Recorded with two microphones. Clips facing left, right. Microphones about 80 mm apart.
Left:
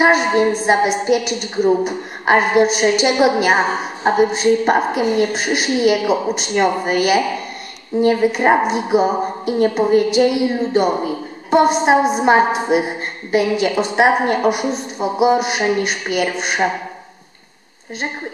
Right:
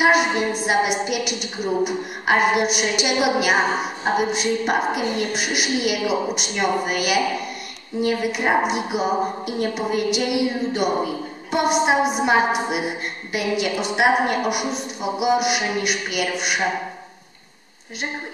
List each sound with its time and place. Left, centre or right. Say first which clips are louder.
0.0 s a woman's voice: left 4 dB; left